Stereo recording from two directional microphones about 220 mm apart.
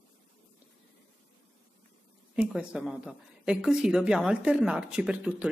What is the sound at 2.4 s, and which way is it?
Speech, 5° right (ahead or behind).